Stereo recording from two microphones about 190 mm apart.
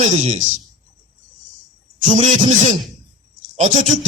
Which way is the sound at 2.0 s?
35° right (ahead or behind).